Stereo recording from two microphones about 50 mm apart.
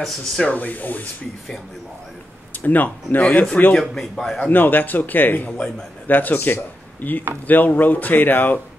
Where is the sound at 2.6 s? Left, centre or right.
Left.